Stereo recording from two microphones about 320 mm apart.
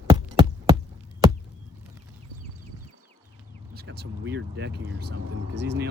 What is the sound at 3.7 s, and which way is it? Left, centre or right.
Speech, right.